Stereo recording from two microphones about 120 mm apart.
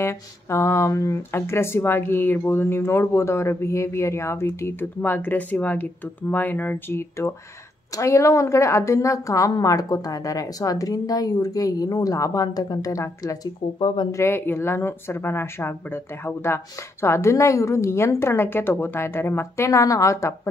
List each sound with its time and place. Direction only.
0.0 s a woman's voice: 20° left (ahead or behind)
13.7 s speech: 45° left (ahead or behind)
14.1 s a woman's voice: 20° left (ahead or behind)